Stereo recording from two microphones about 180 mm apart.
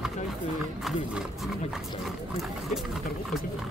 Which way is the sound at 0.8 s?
Centre (ahead or behind).